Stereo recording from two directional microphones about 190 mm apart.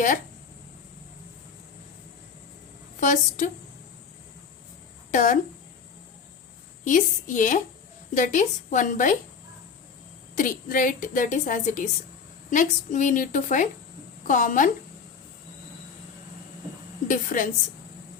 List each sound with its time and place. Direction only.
3.0 s a woman's voice: 40° left (ahead or behind)
5.1 s a woman's voice: 40° left (ahead or behind)
6.8 s a woman's voice: 40° left (ahead or behind)
10.3 s a woman's voice: 45° left (ahead or behind)
17.1 s a woman's voice: 45° left (ahead or behind)